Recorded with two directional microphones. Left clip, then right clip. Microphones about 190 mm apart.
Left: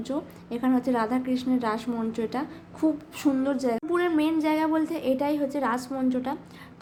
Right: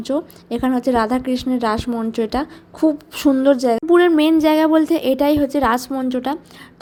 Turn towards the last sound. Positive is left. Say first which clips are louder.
# right 7 dB
turn(degrees=-40)  # may be behind; listen again after turning